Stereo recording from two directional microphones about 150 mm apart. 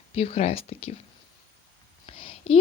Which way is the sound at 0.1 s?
45° left (ahead or behind).